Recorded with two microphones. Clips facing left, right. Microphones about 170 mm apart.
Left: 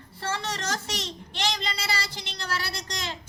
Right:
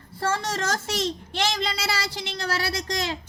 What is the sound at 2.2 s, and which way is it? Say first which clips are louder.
Speech: right 7 dB; 55° right (ahead or behind).